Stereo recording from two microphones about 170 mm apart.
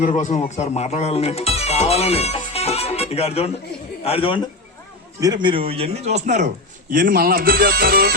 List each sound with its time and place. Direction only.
0.0 s a man's voice: 45° left (ahead or behind)
5.2 s speech: 25° right (ahead or behind); by 6.5 s 45° right (ahead or behind)
6.9 s speech: 60° right (ahead or behind)